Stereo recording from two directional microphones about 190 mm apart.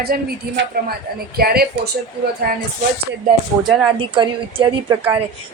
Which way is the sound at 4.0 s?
25° right (ahead or behind).